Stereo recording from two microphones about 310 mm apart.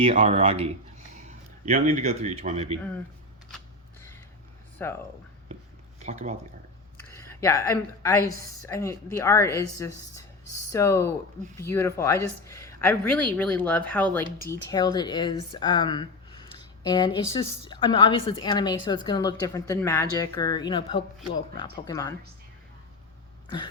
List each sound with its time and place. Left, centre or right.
0.0 s speech: centre
4.8 s a woman's voice: centre
6.0 s speech: right
7.3 s a woman's voice: centre